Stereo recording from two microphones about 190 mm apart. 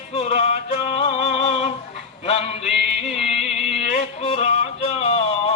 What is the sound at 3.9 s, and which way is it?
Music, 30° left (ahead or behind).